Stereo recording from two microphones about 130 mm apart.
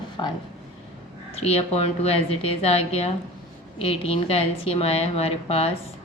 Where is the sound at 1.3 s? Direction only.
50° left (ahead or behind).